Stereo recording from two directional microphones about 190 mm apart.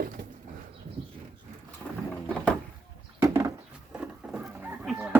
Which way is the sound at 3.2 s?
15° right (ahead or behind).